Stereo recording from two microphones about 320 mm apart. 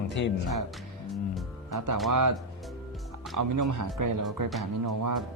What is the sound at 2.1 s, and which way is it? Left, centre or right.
Speech, right.